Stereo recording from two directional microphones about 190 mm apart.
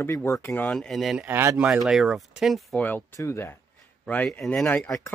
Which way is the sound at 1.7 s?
Centre (ahead or behind).